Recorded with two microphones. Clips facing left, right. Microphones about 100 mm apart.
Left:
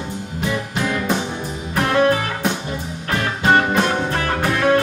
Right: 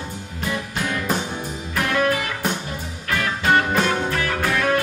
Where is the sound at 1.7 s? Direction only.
35° left (ahead or behind).